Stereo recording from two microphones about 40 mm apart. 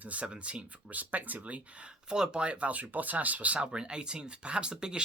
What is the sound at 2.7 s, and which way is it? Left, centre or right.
Speech, right.